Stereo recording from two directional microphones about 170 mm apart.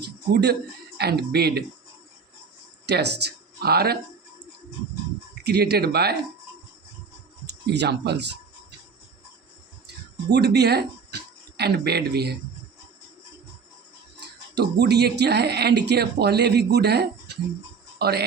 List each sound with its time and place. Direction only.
0.0 s music: 75° right (ahead or behind)
0.9 s speech: 70° right (ahead or behind)
2.8 s speech: 75° right (ahead or behind)
5.3 s speech: 70° right (ahead or behind)
7.7 s speech: 80° right
10.3 s speech: 75° right (ahead or behind)
14.2 s speech: 80° right